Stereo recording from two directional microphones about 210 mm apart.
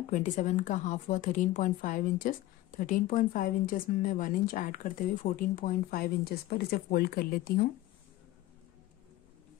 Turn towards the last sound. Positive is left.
turn(degrees=45)  # may be behind; listen again after turning